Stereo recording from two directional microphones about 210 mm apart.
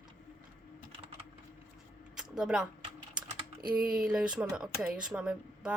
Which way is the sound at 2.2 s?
5° right (ahead or behind).